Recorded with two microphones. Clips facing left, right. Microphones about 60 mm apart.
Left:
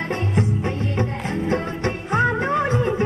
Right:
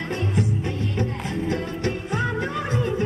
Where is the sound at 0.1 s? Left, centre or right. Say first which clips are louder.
Left 1 dB; left.